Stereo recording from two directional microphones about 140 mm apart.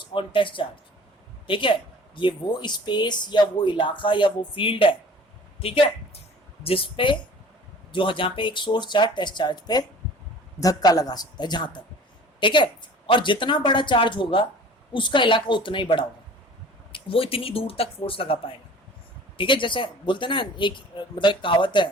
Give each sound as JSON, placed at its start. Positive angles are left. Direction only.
{"t": 0.1, "sound": "speech", "side_deg": 35}